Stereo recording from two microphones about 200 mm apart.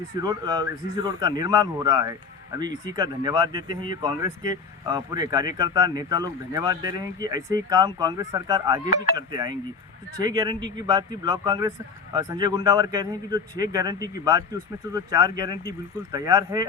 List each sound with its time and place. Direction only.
0.2 s speech: 20° right (ahead or behind)